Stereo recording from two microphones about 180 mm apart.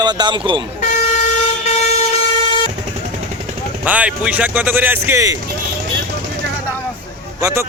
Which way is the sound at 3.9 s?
5° right (ahead or behind).